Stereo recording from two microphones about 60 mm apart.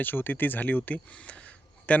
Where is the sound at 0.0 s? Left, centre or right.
Left.